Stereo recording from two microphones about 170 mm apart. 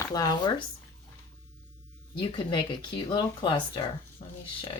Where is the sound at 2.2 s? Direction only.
25° left (ahead or behind).